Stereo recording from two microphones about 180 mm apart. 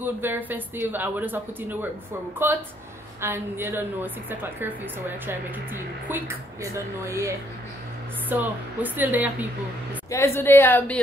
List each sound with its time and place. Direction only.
0.0 s a woman's voice: 10° right (ahead or behind)
10.0 s a woman's voice: 15° left (ahead or behind)